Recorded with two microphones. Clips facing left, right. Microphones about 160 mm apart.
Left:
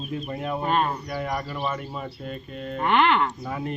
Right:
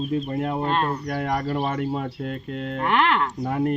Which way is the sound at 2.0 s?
75° right (ahead or behind).